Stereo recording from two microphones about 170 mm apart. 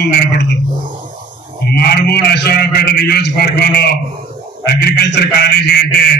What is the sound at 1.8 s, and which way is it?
A man's voice, 75° left (ahead or behind).